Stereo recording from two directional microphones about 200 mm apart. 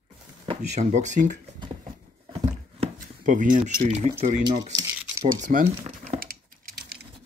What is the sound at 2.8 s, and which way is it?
Speech, 40° right (ahead or behind).